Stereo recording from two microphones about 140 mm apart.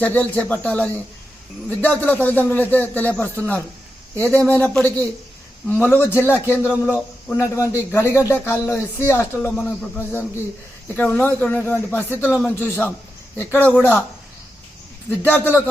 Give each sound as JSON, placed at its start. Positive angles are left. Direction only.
{"t": 0.0, "sound": "a man's voice", "side_deg": 10}
{"t": 15.1, "sound": "speech", "side_deg": 10}